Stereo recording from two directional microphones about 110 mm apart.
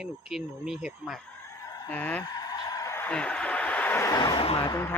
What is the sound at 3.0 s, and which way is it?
Speech, 10° left (ahead or behind).